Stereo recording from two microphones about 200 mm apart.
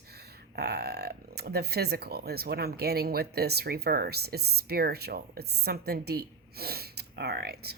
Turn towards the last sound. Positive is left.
turn(degrees=-55)  # may be behind; listen again after turning